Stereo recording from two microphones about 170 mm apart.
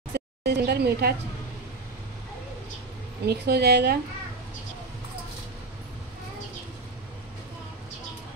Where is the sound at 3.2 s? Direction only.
70° right (ahead or behind).